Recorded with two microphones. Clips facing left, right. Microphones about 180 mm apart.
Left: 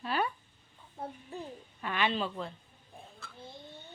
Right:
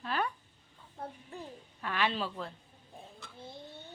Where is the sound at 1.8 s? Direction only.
Centre (ahead or behind).